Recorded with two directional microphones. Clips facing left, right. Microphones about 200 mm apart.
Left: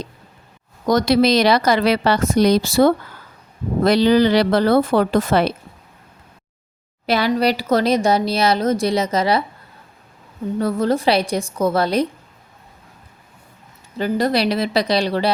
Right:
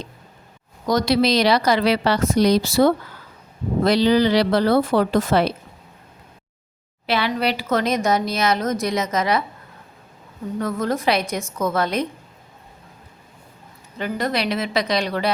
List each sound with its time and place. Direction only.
0.9 s a woman's voice: 50° left (ahead or behind)
7.1 s a woman's voice: 40° left (ahead or behind)
10.6 s a woman's voice: 30° left (ahead or behind)
14.0 s a woman's voice: 35° left (ahead or behind)